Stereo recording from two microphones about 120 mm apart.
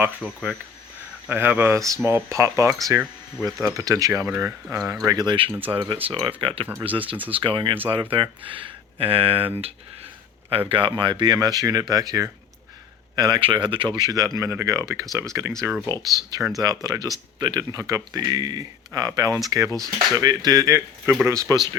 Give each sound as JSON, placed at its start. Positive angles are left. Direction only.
{"t": 0.0, "sound": "speech", "side_deg": -5}
{"t": 1.3, "sound": "speech", "side_deg": -15}
{"t": 5.0, "sound": "speech", "side_deg": -35}
{"t": 10.7, "sound": "speech", "side_deg": -45}